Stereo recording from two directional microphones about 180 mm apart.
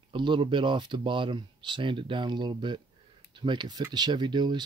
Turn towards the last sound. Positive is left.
turn(degrees=-25)  # may be behind; listen again after turning